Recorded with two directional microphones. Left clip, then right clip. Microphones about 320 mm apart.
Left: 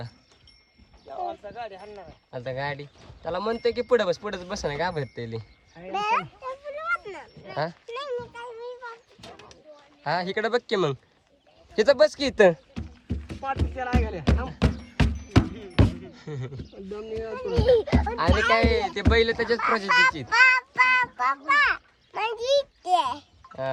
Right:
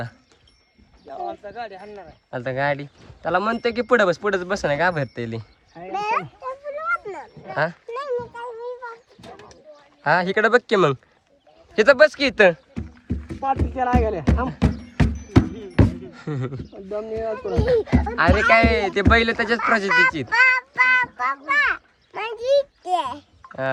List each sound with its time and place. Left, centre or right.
1.2 s speech: right
2.3 s speech: centre
5.9 s children playing: centre
7.5 s speech: centre
7.9 s a sound: centre
10.0 s speech: centre
12.7 s rowboat: centre
14.0 s music: right
14.6 s music: centre
15.6 s a sound: centre
17.0 s speech: centre
19.3 s speech: centre
19.5 s speech: centre
20.2 s child singing: centre